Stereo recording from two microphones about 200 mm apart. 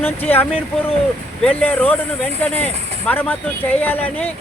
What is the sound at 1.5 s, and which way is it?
Speech, 10° left (ahead or behind).